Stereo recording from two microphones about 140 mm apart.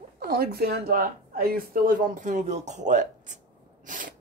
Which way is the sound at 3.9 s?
75° right (ahead or behind).